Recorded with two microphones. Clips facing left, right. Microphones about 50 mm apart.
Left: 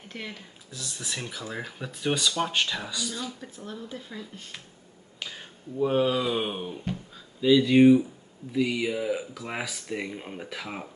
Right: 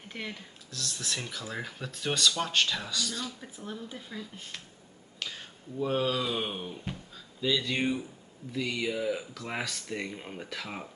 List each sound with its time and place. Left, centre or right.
0.1 s speech: centre
0.7 s speech: centre
3.5 s speech: centre